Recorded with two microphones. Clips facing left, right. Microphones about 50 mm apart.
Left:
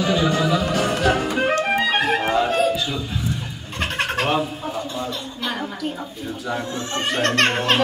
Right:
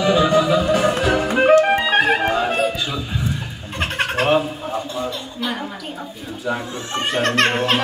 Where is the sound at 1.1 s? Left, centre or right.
Right.